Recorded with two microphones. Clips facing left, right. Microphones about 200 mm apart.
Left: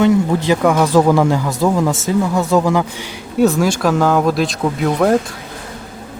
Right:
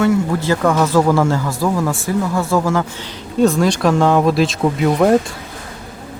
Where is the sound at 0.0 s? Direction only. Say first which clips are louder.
Left 2 dB; 20° left (ahead or behind); by 5.1 s 5° right (ahead or behind).